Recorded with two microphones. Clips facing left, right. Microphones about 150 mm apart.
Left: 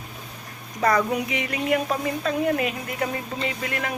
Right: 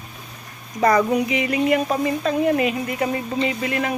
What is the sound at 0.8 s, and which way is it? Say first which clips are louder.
Speech: right 4 dB; centre (ahead or behind).